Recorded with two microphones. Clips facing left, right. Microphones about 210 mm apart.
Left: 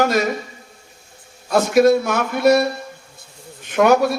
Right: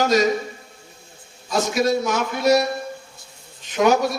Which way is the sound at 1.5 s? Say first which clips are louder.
Left 7 dB; 55° left (ahead or behind).